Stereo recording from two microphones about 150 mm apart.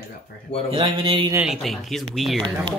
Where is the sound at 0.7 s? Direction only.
35° right (ahead or behind).